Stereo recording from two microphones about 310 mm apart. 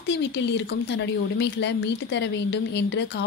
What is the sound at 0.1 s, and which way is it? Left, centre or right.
Speech, left.